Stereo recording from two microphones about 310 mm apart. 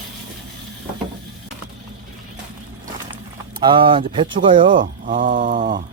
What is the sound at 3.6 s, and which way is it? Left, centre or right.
Speech, centre.